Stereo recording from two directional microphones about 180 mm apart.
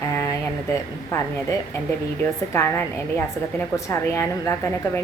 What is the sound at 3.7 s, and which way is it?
A woman's voice, 15° left (ahead or behind).